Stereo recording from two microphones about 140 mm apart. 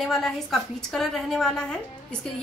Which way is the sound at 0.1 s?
Centre (ahead or behind).